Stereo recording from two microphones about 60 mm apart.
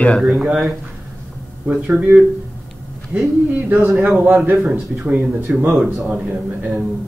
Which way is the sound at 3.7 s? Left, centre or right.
Right.